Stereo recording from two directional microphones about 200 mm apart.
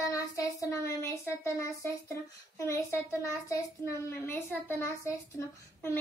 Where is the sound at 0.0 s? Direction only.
15° left (ahead or behind).